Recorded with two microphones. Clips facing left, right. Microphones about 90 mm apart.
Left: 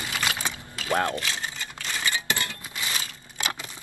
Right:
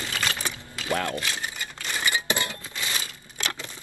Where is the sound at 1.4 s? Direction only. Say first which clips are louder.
Even; 15° right (ahead or behind).